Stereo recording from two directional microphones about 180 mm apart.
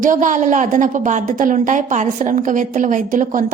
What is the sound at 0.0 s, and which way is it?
A woman's voice, 45° right (ahead or behind).